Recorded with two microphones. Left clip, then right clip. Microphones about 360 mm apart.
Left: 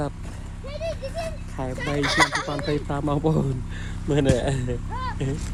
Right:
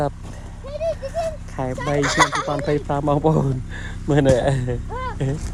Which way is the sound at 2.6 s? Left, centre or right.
Right.